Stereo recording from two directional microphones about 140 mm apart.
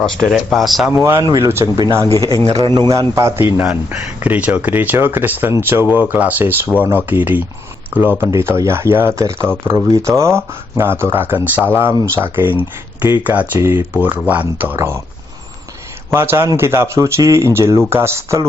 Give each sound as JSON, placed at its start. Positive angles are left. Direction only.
{"t": 0.0, "sound": "speech", "side_deg": 0}
{"t": 0.9, "sound": "speech", "side_deg": -20}
{"t": 2.6, "sound": "speech", "side_deg": -30}
{"t": 16.0, "sound": "speech", "side_deg": -15}